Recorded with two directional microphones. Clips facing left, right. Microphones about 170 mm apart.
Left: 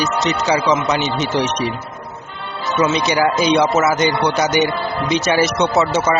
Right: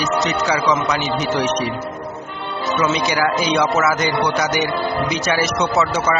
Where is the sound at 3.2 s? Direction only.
25° left (ahead or behind).